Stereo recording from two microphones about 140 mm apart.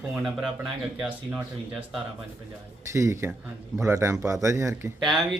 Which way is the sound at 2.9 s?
20° right (ahead or behind).